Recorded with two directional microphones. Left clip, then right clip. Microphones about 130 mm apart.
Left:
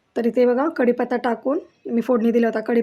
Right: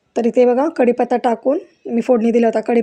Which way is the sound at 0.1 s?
20° right (ahead or behind).